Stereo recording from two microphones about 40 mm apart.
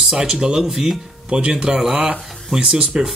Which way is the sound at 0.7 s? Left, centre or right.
Centre.